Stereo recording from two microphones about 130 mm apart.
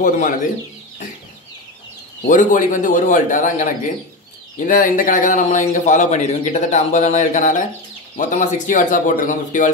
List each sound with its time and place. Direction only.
0.0 s speech: 80° left
2.2 s a man's voice: 85° left
4.6 s a man's voice: 90° left